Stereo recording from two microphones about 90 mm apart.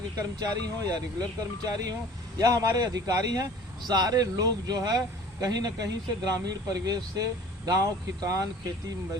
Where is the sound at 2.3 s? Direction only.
40° right (ahead or behind).